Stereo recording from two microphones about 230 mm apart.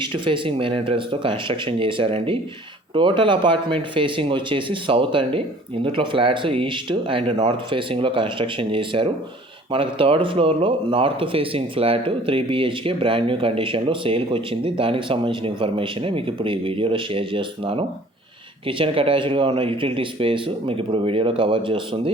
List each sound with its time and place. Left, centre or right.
0.0 s speech: right